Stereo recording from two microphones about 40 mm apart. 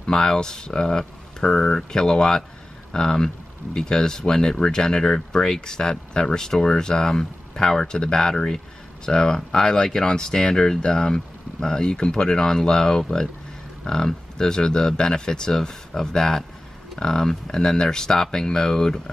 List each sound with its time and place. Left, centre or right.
0.0 s speech: centre